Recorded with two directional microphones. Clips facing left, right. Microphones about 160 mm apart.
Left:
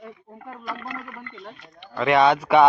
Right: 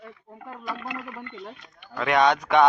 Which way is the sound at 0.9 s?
15° right (ahead or behind).